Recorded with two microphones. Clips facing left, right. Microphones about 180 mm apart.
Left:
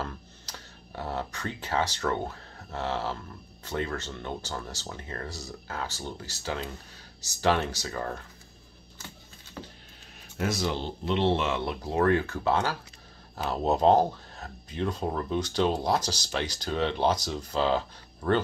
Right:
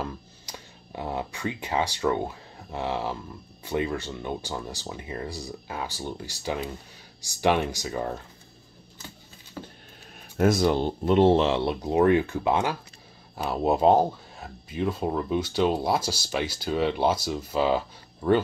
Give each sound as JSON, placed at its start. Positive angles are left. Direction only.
{"t": 0.0, "sound": "speech", "side_deg": -15}
{"t": 9.6, "sound": "a sound", "side_deg": -10}
{"t": 10.3, "sound": "speech", "side_deg": -50}